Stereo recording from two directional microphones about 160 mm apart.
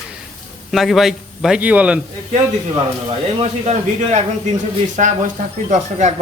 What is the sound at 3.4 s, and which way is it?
Speech, 45° right (ahead or behind).